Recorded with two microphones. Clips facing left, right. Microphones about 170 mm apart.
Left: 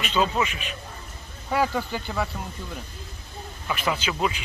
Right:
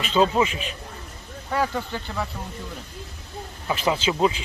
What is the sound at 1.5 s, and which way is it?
Speech, 5° left (ahead or behind).